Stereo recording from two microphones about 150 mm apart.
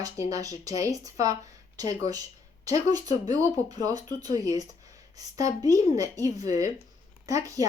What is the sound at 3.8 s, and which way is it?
Speech, 25° right (ahead or behind).